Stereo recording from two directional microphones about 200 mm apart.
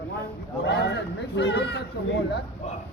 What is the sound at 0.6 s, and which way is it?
Speech, 60° left (ahead or behind).